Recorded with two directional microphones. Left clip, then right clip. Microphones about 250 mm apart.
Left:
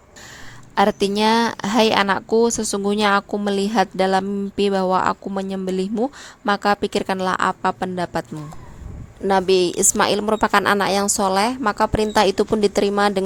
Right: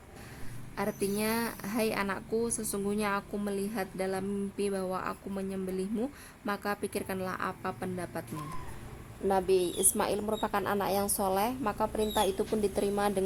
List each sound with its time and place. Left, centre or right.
0.8 s a woman's voice: left
9.2 s a woman's voice: left